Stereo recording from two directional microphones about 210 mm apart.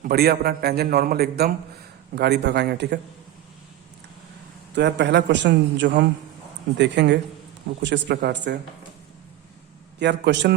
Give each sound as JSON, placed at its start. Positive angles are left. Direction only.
{"t": 0.0, "sound": "a man's voice", "side_deg": -50}
{"t": 4.7, "sound": "a man's voice", "side_deg": -55}
{"t": 10.0, "sound": "a man's voice", "side_deg": -55}